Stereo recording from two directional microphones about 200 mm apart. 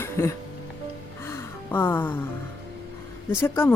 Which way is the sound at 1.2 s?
10° left (ahead or behind).